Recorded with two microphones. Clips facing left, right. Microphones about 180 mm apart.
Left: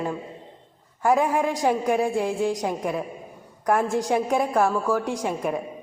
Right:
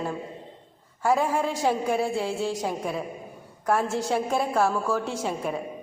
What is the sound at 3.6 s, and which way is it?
A woman's voice, 15° left (ahead or behind).